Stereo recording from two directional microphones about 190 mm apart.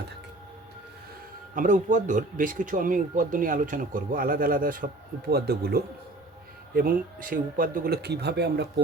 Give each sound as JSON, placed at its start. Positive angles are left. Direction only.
{"t": 1.5, "sound": "speech", "side_deg": -40}